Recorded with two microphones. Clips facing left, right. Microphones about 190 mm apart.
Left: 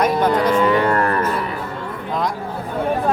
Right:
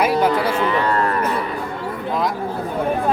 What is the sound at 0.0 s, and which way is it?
Cattle, 10° right (ahead or behind).